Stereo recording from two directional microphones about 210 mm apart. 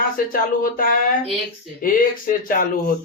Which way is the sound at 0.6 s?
40° left (ahead or behind).